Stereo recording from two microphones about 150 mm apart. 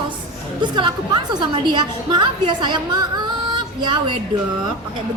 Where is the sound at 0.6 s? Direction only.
30° right (ahead or behind).